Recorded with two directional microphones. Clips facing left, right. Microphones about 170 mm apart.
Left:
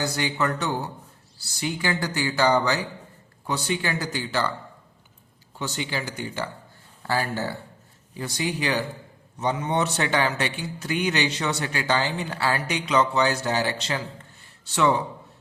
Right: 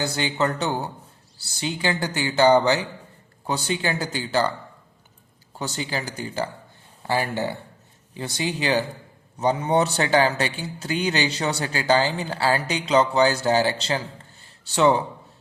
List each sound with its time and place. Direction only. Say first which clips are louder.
0.0 s speech: right 2 dB; 25° right (ahead or behind)
5.5 s a man's voice: right 1 dB; 40° right (ahead or behind)
7.0 s a man's voice: right 2 dB; 20° right (ahead or behind)